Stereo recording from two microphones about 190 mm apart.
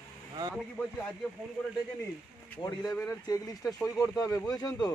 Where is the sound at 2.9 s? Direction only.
10° left (ahead or behind).